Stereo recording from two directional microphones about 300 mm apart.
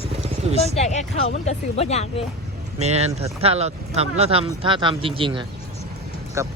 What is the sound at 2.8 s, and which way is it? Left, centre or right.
Speech, right.